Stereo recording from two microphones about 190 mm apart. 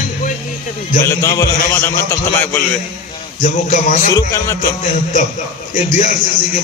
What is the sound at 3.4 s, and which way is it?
Speech, 40° left (ahead or behind).